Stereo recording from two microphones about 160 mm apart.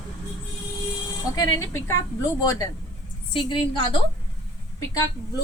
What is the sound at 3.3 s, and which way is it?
Speech, 35° left (ahead or behind).